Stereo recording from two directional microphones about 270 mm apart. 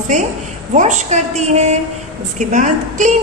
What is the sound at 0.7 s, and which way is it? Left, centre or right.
A woman's voice, right.